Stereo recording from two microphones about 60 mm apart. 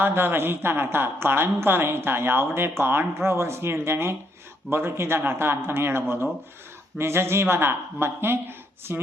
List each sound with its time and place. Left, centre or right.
0.0 s a woman's voice: right